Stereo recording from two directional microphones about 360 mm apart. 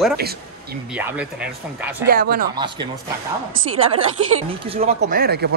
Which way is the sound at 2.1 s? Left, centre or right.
Right.